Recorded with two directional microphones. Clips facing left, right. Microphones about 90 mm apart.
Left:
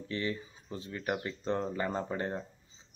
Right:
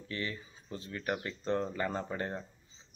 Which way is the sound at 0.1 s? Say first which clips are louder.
Left 4 dB; 25° left (ahead or behind).